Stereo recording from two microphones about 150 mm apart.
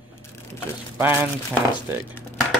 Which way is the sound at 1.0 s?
15° right (ahead or behind).